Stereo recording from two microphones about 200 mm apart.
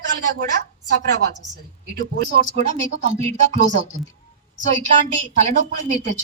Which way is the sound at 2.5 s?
35° right (ahead or behind).